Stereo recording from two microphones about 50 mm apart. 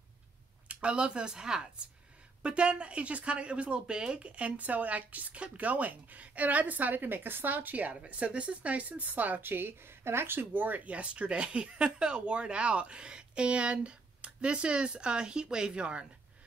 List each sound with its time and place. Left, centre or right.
0.7 s speech: right
4.5 s speech: right